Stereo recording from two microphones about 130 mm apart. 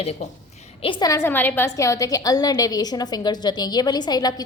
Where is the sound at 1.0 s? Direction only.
20° left (ahead or behind).